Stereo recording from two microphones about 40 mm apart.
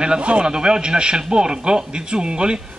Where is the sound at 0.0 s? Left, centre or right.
Right.